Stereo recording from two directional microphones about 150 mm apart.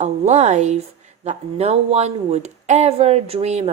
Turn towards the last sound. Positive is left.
turn(degrees=-45)  # may be behind; listen again after turning